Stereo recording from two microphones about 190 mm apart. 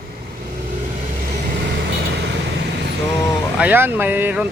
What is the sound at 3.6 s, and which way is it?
Speech, 10° right (ahead or behind).